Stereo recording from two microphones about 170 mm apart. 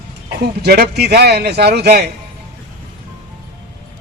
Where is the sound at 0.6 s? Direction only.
70° right (ahead or behind).